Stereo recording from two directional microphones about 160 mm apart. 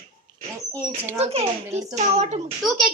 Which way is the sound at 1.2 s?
40° right (ahead or behind).